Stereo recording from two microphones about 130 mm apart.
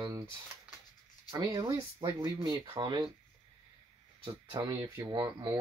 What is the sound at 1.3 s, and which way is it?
Speech, 35° right (ahead or behind).